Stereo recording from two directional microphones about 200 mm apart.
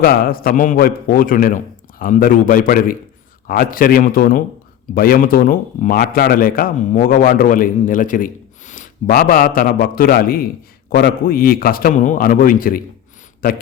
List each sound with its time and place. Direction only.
0.0 s speech: 45° left (ahead or behind)